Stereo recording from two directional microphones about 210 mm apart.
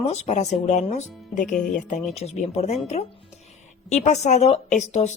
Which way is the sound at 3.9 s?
30° left (ahead or behind).